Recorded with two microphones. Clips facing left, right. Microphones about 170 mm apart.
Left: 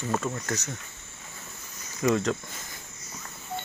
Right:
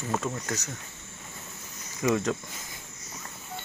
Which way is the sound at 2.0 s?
15° right (ahead or behind).